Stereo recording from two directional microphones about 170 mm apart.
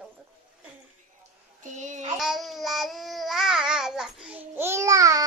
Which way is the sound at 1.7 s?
45° right (ahead or behind).